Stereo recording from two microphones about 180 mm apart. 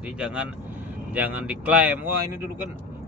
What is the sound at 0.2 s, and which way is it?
Speech, 5° right (ahead or behind).